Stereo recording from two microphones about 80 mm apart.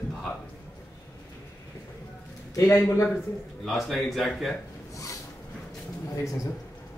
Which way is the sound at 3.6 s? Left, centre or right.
Centre.